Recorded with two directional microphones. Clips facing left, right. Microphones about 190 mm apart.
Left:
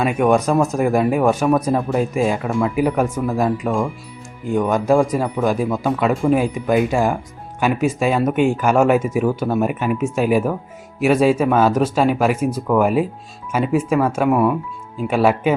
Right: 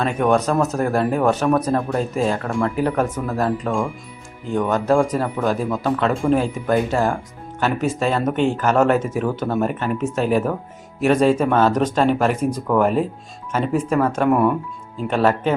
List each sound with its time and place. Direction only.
0.0 s speech: 10° left (ahead or behind)